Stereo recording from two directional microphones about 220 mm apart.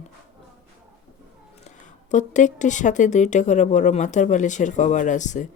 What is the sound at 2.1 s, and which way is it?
Speech, 35° left (ahead or behind).